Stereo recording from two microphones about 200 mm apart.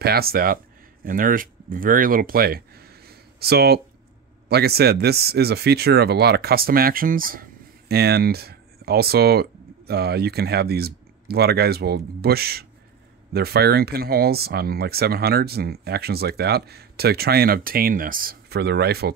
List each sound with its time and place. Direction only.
0.0 s speech: 50° right (ahead or behind)